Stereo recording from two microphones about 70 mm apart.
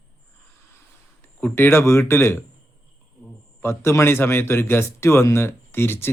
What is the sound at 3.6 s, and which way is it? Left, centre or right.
Speech, left.